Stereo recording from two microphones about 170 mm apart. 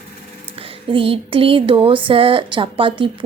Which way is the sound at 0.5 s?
35° right (ahead or behind).